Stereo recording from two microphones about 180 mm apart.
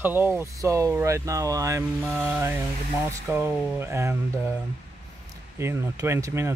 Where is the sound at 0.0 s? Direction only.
10° right (ahead or behind).